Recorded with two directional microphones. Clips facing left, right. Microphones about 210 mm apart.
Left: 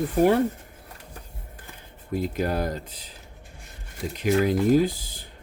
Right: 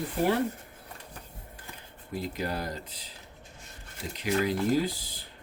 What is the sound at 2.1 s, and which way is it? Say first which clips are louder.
Speech: left 7 dB; 50° left (ahead or behind).